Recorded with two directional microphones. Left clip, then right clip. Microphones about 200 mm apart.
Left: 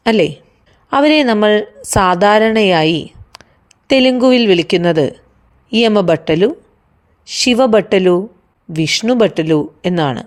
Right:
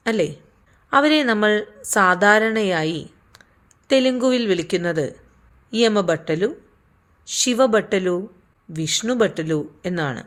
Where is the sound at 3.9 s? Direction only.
30° left (ahead or behind).